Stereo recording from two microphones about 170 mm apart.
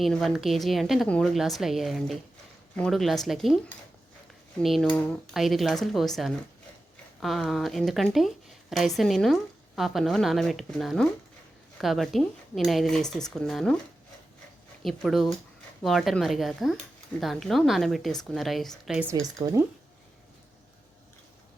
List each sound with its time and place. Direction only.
0.0 s a woman's voice: centre (ahead or behind)
4.6 s a woman's voice: centre (ahead or behind)
14.8 s a woman's voice: centre (ahead or behind)
19.1 s a woman's voice: 20° right (ahead or behind)